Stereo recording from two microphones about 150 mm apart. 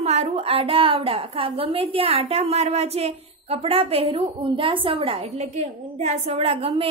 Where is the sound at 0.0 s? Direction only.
45° right (ahead or behind).